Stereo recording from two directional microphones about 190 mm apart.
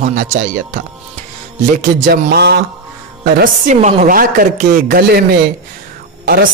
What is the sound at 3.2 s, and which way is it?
Speech, 45° right (ahead or behind).